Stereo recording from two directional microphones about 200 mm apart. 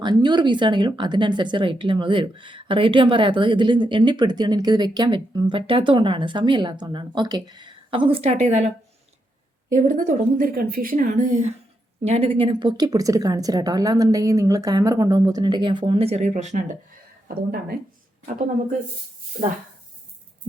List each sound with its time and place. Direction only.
0.0 s a woman's voice: 20° right (ahead or behind)
9.7 s a woman's voice: 40° right (ahead or behind)